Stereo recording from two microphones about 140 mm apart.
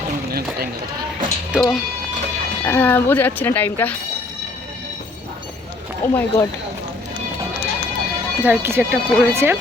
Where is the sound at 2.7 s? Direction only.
15° left (ahead or behind).